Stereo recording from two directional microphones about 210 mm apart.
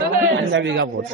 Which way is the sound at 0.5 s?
60° right (ahead or behind).